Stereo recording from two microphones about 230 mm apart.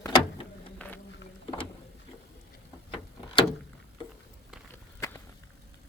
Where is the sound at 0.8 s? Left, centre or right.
Centre.